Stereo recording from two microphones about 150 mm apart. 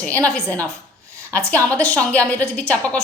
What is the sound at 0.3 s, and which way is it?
Speech, 5° left (ahead or behind).